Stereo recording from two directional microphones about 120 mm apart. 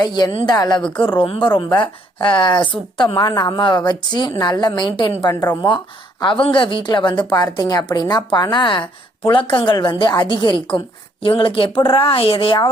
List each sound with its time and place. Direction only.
0.0 s a woman's voice: 35° left (ahead or behind)
0.8 s a woman's voice: 10° left (ahead or behind)
1.2 s a woman's voice: 45° left (ahead or behind)
5.2 s speech: 25° left (ahead or behind)
5.6 s a woman's voice: 45° left (ahead or behind)